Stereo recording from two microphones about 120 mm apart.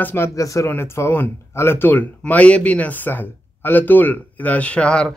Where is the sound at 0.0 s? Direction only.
20° left (ahead or behind).